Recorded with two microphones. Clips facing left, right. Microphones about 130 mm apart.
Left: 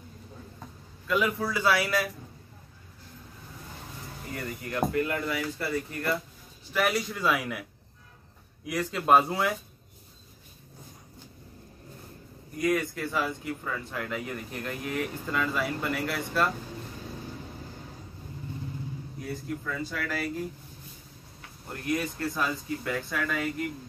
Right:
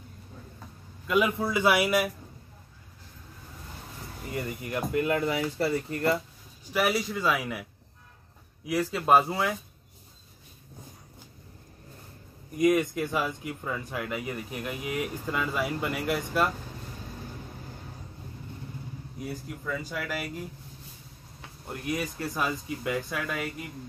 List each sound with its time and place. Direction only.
1.0 s speech: 15° right (ahead or behind)
4.5 s speech: 20° right (ahead or behind)
6.7 s speech: 5° right (ahead or behind)
8.6 s speech: 5° right (ahead or behind)
12.5 s speech: 15° right (ahead or behind)
19.2 s speech: 10° right (ahead or behind)
21.7 s speech: 10° right (ahead or behind)